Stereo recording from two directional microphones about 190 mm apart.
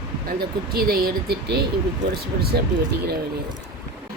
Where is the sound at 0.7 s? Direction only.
50° right (ahead or behind).